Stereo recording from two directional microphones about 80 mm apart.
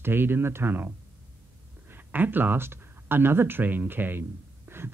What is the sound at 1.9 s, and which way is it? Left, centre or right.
Speech, right.